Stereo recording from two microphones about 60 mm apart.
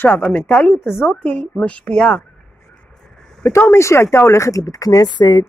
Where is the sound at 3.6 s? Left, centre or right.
Left.